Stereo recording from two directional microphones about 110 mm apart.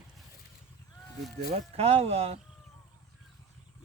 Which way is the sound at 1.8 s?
65° right (ahead or behind).